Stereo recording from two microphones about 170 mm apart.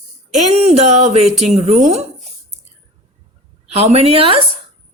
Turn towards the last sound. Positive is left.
turn(degrees=-35)  # may be behind; listen again after turning